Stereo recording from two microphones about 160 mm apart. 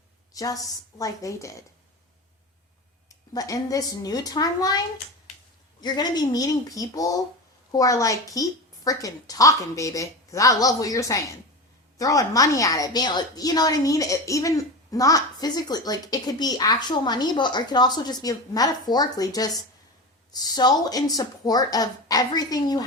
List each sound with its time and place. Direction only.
0.3 s a woman's voice: 20° left (ahead or behind)
3.1 s a woman's voice: 20° left (ahead or behind)
5.8 s a woman's voice: 25° left (ahead or behind)